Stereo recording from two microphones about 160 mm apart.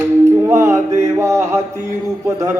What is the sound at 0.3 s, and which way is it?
Music, 15° right (ahead or behind).